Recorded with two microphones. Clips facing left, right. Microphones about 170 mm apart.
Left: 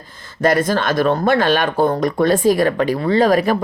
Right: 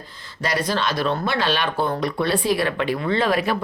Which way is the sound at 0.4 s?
50° left (ahead or behind).